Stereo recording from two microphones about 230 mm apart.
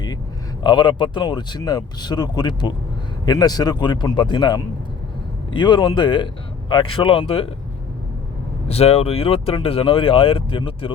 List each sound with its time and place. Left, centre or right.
0.6 s speech: centre
8.6 s speech: left